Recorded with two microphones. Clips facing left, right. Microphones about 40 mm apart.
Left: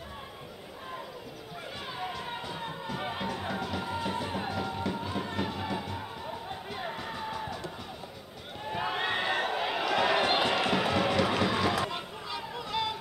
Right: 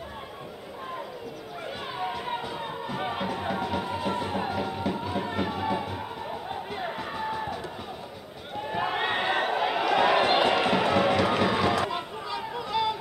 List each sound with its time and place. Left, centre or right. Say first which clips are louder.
2.0 s music: right 6 dB; centre
8.6 s a sound: right 3 dB; centre
9.5 s run: right 5 dB; centre